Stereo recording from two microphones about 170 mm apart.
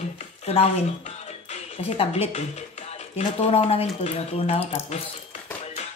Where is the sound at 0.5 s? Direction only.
35° left (ahead or behind).